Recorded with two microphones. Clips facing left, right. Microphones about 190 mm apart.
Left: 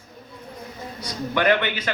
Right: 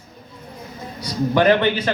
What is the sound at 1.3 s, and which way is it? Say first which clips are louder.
Speech: right 5 dB; 40° right (ahead or behind).